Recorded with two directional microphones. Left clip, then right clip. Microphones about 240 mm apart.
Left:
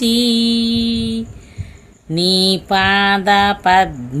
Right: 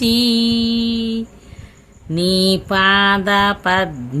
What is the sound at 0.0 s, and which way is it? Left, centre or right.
Mantra, centre.